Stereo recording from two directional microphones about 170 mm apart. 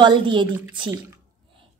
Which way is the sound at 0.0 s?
25° right (ahead or behind).